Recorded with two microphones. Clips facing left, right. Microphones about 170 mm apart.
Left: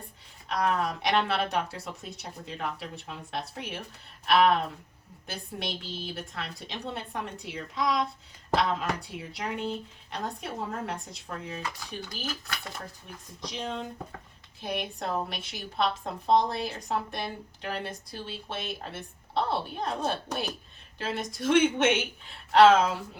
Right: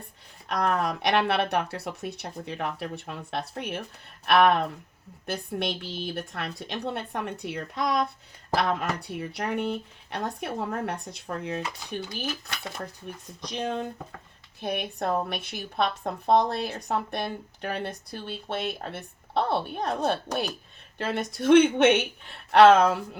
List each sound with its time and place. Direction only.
0.4 s a woman's voice: 60° right (ahead or behind)
11.6 s speech: 25° right (ahead or behind)
13.5 s a woman's voice: 60° right (ahead or behind)